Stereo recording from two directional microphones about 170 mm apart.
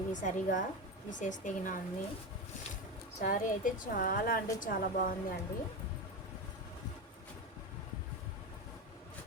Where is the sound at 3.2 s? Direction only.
55° left (ahead or behind).